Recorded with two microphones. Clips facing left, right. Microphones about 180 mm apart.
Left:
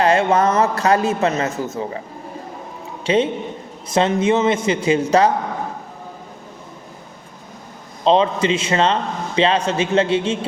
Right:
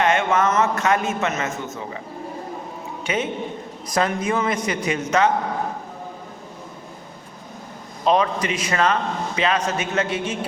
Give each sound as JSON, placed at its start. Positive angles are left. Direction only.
{"t": 0.0, "sound": "a man's voice", "side_deg": 35}
{"t": 3.0, "sound": "a man's voice", "side_deg": 30}
{"t": 8.0, "sound": "a man's voice", "side_deg": 25}